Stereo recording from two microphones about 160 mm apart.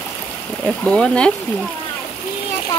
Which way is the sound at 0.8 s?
5° left (ahead or behind).